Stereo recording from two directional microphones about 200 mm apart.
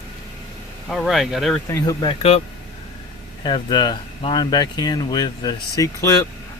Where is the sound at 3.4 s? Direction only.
25° left (ahead or behind).